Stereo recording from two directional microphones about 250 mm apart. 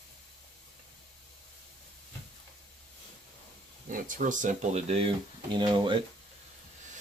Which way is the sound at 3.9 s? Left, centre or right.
Right.